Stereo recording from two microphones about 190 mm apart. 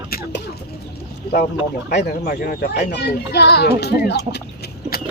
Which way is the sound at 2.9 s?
60° left (ahead or behind).